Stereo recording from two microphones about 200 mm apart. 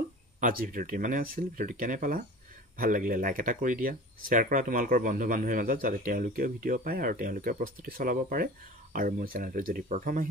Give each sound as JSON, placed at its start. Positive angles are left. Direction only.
{"t": 0.4, "sound": "speech", "side_deg": -45}